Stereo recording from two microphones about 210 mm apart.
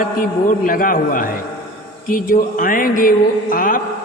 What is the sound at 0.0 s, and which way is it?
A man's voice, 40° left (ahead or behind).